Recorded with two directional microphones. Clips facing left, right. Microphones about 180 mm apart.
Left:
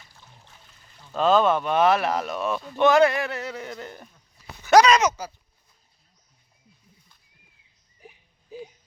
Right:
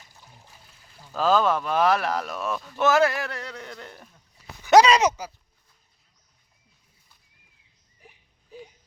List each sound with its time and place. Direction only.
0.0 s trickle: 15° right (ahead or behind)
0.9 s speech: 5° right (ahead or behind)
4.6 s speech: 25° right (ahead or behind)